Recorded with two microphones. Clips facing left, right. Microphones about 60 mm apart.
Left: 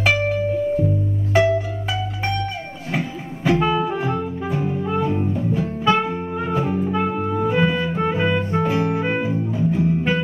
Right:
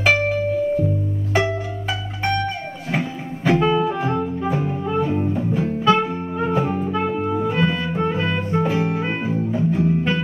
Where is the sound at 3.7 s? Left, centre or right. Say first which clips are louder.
Right 1 dB; centre.